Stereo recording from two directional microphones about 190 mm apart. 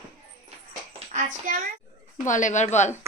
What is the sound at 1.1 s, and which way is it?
Speech, 45° right (ahead or behind).